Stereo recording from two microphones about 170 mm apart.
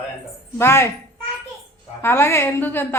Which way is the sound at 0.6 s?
15° left (ahead or behind).